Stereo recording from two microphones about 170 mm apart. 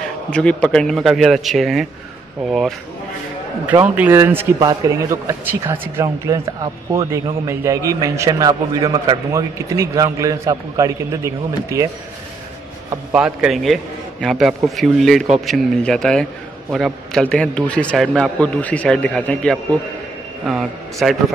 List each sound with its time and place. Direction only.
0.3 s a man's voice: 5° left (ahead or behind); by 11.9 s 20° right (ahead or behind)
13.1 s a man's voice: 5° right (ahead or behind)